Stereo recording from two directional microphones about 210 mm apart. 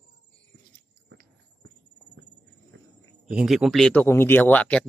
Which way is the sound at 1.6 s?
60° right (ahead or behind).